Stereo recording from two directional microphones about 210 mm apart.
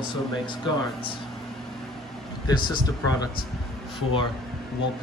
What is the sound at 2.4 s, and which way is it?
Speech, 20° left (ahead or behind).